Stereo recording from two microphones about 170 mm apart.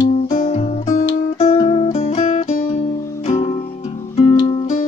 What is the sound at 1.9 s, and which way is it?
Music, 45° left (ahead or behind).